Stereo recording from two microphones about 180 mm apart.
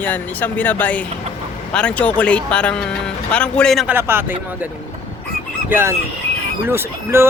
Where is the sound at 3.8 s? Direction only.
10° right (ahead or behind).